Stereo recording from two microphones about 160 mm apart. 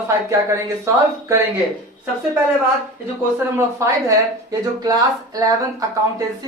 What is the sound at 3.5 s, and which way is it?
Speech, 20° right (ahead or behind).